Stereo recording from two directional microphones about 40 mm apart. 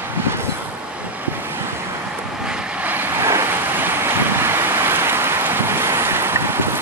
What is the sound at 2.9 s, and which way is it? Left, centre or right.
Vehicle, right.